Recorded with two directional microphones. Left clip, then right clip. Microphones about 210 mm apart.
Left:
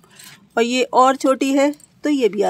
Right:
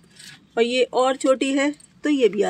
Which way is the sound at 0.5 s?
20° left (ahead or behind).